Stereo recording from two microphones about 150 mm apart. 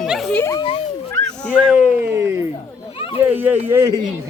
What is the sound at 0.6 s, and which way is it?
Speech, 35° left (ahead or behind).